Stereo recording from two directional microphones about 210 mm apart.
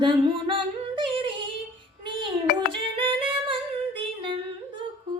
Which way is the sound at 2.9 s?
25° right (ahead or behind).